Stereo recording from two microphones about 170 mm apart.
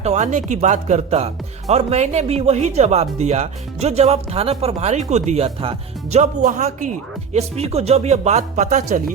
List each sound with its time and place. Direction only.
0.0 s speech: 40° right (ahead or behind)